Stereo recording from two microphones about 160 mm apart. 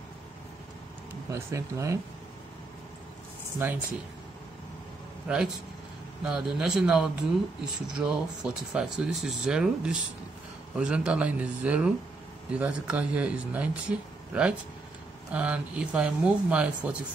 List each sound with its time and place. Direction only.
1.3 s speech: 20° right (ahead or behind)
3.6 s speech: 15° right (ahead or behind)
5.3 s speech: 5° right (ahead or behind)